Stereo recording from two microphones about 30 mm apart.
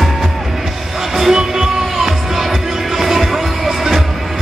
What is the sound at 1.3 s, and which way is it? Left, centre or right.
Music, right.